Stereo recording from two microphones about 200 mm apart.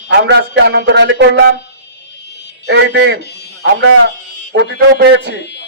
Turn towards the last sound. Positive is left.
turn(degrees=60)  # may be behind; listen again after turning